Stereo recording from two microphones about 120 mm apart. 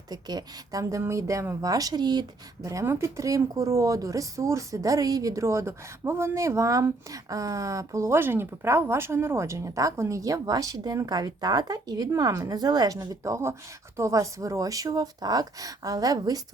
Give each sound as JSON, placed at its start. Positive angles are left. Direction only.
{"t": 0.1, "sound": "a woman's voice", "side_deg": -35}
{"t": 2.6, "sound": "a woman's voice", "side_deg": -25}